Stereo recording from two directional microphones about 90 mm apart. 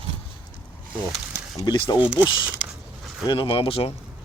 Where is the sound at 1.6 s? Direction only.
55° left (ahead or behind).